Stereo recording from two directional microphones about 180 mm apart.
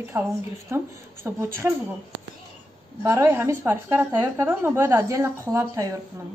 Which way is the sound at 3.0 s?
15° right (ahead or behind).